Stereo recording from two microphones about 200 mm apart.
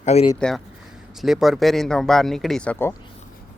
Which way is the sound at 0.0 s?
30° left (ahead or behind).